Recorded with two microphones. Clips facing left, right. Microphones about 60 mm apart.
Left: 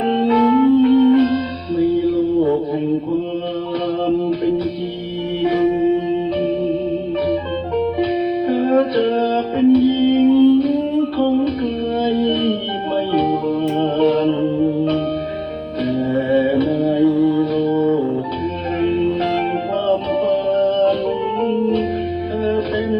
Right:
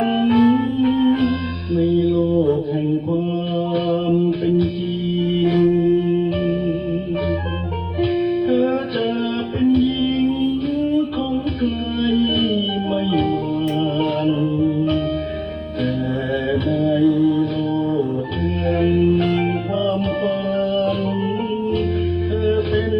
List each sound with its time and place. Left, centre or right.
0.3 s music: left
3.8 s music: left
5.6 s music: centre
7.9 s music: left
9.6 s music: left
12.5 s music: left
13.8 s a sound: left
16.8 s music: left
20.5 s music: left
22.4 s music: left